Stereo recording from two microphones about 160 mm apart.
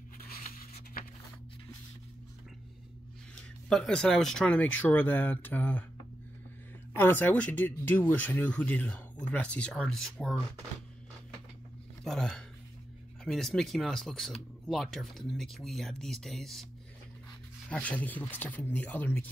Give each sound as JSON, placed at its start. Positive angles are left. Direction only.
{"t": 0.2, "sound": "a sound", "side_deg": 70}
{"t": 3.3, "sound": "speech", "side_deg": 5}
{"t": 7.0, "sound": "speech", "side_deg": 15}
{"t": 12.0, "sound": "speech", "side_deg": 5}
{"t": 17.6, "sound": "speech", "side_deg": 10}